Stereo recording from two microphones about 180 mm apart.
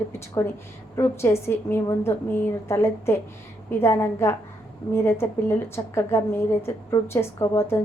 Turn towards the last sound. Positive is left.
turn(degrees=15)  # may be behind; listen again after turning